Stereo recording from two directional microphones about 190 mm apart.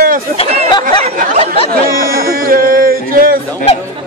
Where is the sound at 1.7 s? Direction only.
50° right (ahead or behind).